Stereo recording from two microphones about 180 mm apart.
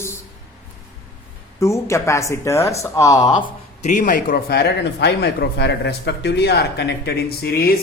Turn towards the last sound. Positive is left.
turn(degrees=60)  # may be behind; listen again after turning